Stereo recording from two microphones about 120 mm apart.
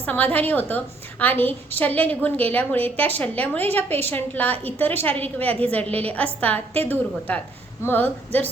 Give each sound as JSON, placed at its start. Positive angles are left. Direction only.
{"t": 0.0, "sound": "a woman's voice", "side_deg": 15}